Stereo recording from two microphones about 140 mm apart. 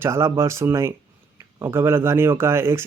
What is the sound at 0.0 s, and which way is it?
Speech, 20° right (ahead or behind).